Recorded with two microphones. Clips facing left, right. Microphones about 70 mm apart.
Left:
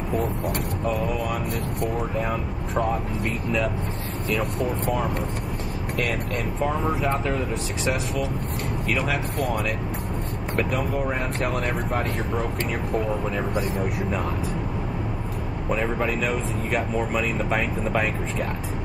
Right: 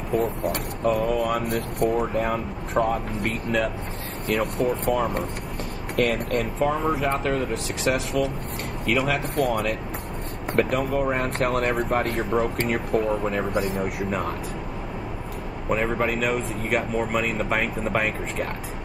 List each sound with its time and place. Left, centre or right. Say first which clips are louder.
0.5 s speech: right 2 dB; right
2.7 s speech: right 2 dB; centre
3.2 s speech: right 1 dB; right
5.9 s speech: right 5 dB; right
6.7 s speech: right 1 dB; centre
7.0 s speech: right 1 dB; right
8.8 s speech: right 4 dB; right
12.9 s speech: right 2 dB; centre
15.7 s speech: right 1 dB; centre